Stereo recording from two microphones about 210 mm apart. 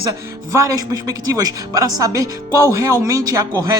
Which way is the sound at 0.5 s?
15° right (ahead or behind).